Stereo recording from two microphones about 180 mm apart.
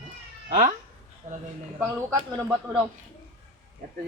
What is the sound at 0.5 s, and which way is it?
Cat, 45° right (ahead or behind).